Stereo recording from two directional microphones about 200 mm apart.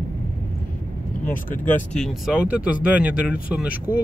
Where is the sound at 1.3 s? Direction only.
10° left (ahead or behind).